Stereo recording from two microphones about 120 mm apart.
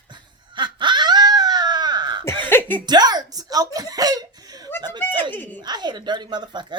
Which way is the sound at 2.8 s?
35° right (ahead or behind).